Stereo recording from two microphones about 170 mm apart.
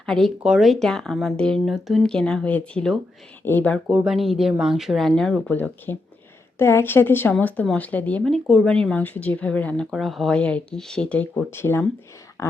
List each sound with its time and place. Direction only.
0.0 s a woman's voice: centre (ahead or behind)
3.8 s a woman's voice: 5° right (ahead or behind); by 12.5 s 20° left (ahead or behind)